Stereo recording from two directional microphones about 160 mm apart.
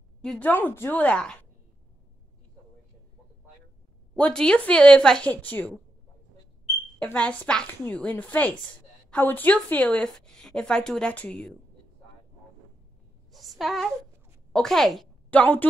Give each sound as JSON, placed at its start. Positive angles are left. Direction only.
{"t": 0.2, "sound": "a woman's voice", "side_deg": 5}
{"t": 4.1, "sound": "a woman's voice", "side_deg": 5}
{"t": 7.0, "sound": "a woman's voice", "side_deg": 10}
{"t": 13.3, "sound": "a sound", "side_deg": 0}
{"t": 14.5, "sound": "a woman's voice", "side_deg": 5}